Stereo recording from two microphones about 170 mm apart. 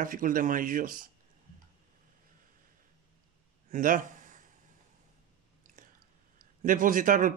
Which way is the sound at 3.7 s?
50° right (ahead or behind).